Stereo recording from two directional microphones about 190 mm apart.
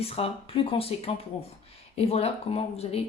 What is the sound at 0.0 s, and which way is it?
Speech, 30° left (ahead or behind).